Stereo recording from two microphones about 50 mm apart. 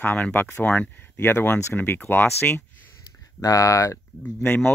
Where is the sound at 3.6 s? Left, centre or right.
Left.